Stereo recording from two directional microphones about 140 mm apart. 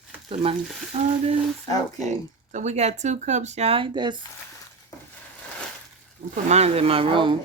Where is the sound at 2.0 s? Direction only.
60° right (ahead or behind); by 4.2 s 35° right (ahead or behind).